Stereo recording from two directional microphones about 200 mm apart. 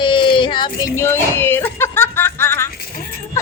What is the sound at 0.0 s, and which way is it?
Child singing, 25° left (ahead or behind).